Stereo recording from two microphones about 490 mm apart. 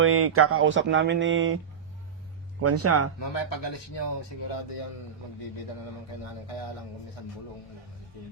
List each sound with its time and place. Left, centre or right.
0.0 s speech: right
2.6 s speech: right
3.2 s speech: left
4.5 s speech: left